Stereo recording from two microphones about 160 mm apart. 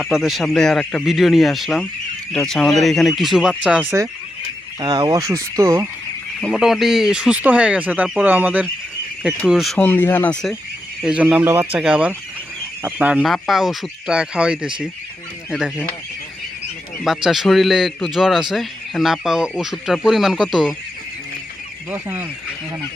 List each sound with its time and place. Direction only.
0.0 s speech: 5° right (ahead or behind)
4.8 s speech: 25° right (ahead or behind)
6.4 s speech: centre (ahead or behind); by 10.3 s 15° left (ahead or behind)
11.0 s speech: 10° right (ahead or behind)
17.2 s speech: centre (ahead or behind)
21.8 s speech: 10° right (ahead or behind)